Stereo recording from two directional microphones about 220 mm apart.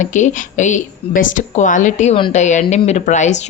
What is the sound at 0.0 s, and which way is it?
A woman's voice, 35° left (ahead or behind).